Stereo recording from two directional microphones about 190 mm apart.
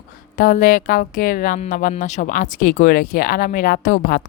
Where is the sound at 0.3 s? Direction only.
45° left (ahead or behind).